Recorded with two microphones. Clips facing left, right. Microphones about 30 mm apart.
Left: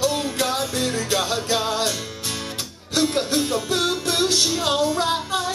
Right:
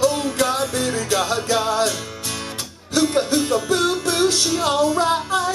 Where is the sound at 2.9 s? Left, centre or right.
Centre.